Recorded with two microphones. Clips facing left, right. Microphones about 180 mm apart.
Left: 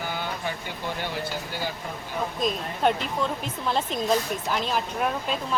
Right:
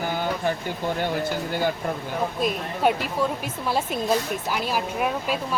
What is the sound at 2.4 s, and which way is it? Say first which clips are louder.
Speech: left 1 dB; 5° right (ahead or behind).